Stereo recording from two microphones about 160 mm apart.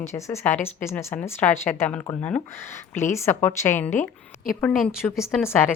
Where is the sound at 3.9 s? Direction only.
50° left (ahead or behind).